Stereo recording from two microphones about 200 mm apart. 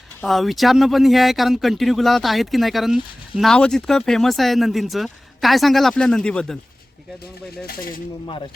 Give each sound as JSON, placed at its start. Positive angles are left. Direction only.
{"t": 0.2, "sound": "speech", "side_deg": 0}
{"t": 7.7, "sound": "speech", "side_deg": 45}